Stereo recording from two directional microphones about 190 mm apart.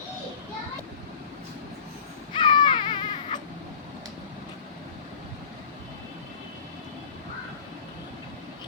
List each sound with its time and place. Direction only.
2.3 s baby cry: 25° left (ahead or behind)